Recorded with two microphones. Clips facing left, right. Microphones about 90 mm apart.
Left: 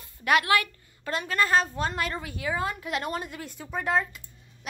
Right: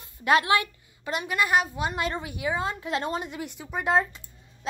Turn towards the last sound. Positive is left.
turn(degrees=-30)  # may be behind; listen again after turning